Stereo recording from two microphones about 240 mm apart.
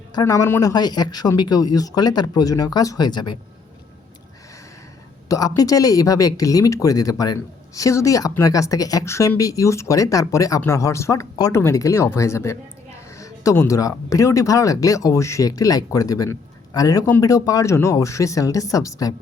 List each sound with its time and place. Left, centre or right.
0.1 s speech: centre
5.3 s speech: centre